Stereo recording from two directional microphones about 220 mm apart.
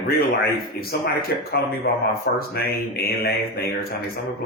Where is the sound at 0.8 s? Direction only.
45° left (ahead or behind).